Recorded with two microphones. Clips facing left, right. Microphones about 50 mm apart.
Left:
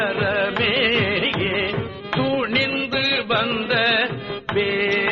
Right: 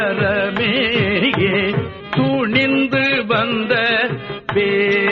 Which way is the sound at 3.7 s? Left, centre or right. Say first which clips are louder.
Right 2 dB; centre.